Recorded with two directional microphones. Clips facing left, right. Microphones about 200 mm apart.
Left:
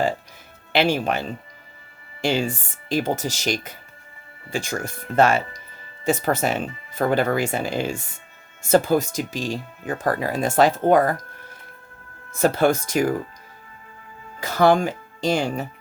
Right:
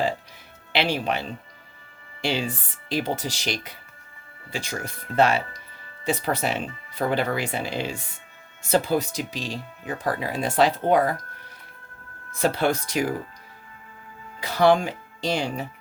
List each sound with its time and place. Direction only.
0.7 s speech: 45° left (ahead or behind)
12.3 s speech: 45° left (ahead or behind)
14.4 s speech: 45° left (ahead or behind)